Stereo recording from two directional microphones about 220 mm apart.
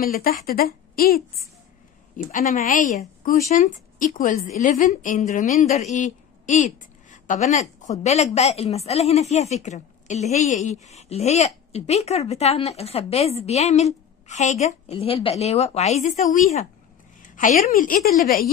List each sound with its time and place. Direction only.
0.0 s a woman's voice: 40° left (ahead or behind)